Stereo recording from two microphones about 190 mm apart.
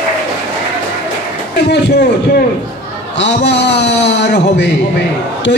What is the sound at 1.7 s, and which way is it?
A man's voice, 60° left (ahead or behind).